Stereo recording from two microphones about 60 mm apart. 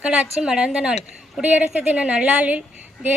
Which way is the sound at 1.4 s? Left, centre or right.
Right.